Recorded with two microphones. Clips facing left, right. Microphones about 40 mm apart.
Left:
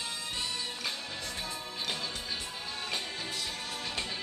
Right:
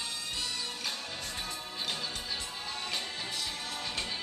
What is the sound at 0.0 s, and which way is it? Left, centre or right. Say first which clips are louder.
Music: left 1 dB; centre.